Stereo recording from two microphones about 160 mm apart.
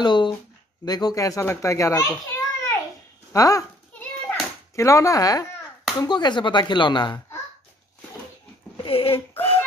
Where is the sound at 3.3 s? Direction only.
20° left (ahead or behind).